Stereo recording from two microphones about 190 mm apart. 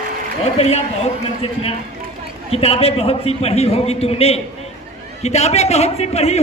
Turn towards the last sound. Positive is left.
turn(degrees=35)  # may be behind; listen again after turning